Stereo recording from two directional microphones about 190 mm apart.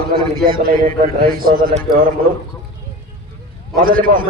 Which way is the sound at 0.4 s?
50° right (ahead or behind).